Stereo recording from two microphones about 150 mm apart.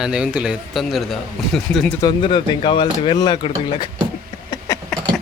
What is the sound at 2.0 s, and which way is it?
Speech, 30° left (ahead or behind).